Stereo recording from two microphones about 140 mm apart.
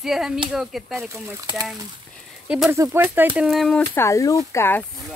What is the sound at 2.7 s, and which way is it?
Speech, 20° right (ahead or behind).